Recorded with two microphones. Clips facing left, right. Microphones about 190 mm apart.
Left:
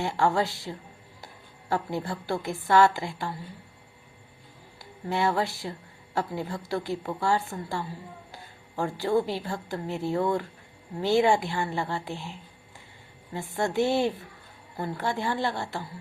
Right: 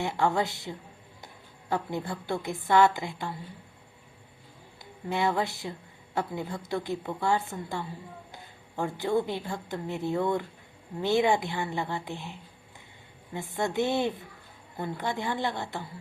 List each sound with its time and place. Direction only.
0.0 s a woman's voice: 20° right (ahead or behind)
4.8 s a woman's voice: 20° right (ahead or behind)
13.5 s a woman's voice: 20° right (ahead or behind)